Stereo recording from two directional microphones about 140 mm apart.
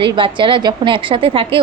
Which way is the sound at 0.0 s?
35° right (ahead or behind).